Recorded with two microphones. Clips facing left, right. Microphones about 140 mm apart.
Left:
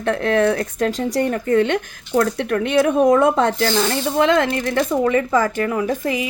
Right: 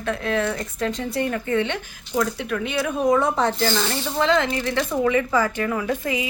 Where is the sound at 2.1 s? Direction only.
55° left (ahead or behind).